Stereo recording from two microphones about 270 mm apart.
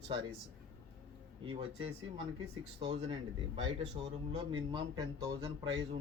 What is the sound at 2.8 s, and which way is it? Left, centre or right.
Speech, right.